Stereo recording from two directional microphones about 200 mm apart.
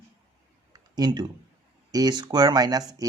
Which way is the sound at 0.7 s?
20° right (ahead or behind).